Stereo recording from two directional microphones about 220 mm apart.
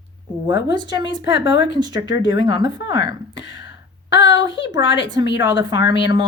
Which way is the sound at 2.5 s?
20° right (ahead or behind).